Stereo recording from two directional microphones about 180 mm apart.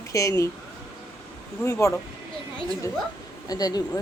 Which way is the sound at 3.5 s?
20° left (ahead or behind).